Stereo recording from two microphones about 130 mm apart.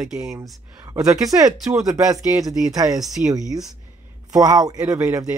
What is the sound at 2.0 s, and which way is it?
A man's voice, 25° right (ahead or behind).